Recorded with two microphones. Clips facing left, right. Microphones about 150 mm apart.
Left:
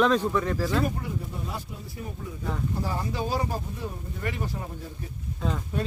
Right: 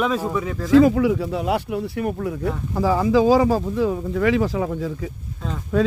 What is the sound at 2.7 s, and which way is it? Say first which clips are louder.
Speech: right 13 dB; 90° right.